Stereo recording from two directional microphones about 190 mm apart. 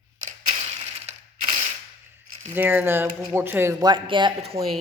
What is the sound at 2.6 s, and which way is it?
Speech, 10° right (ahead or behind).